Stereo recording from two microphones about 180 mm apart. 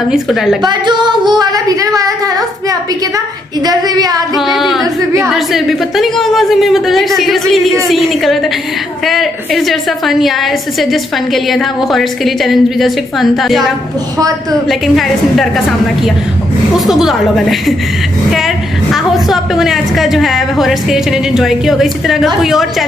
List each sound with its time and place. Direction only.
0.1 s a woman's voice: centre (ahead or behind)
0.7 s speech: 25° right (ahead or behind)
4.4 s a woman's voice: centre (ahead or behind)
14.7 s a woman's voice: centre (ahead or behind)